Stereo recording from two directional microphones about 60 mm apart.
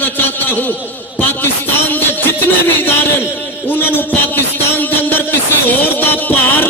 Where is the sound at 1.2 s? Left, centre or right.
Left.